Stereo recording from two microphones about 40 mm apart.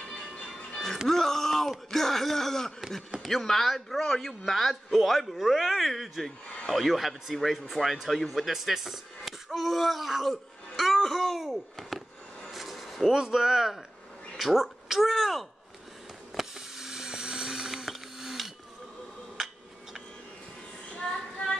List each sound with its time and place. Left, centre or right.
0.1 s music: left
1.0 s speech: centre
8.5 s speech: centre
12.4 s a sound: centre
13.1 s speech: centre
14.3 s a sound: centre
15.0 s speech: centre
16.3 s a sound: centre
20.9 s child singing: centre